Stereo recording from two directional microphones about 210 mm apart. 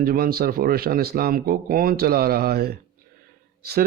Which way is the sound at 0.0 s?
45° right (ahead or behind).